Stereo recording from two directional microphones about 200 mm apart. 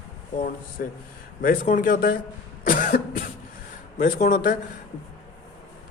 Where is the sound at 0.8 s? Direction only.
45° left (ahead or behind).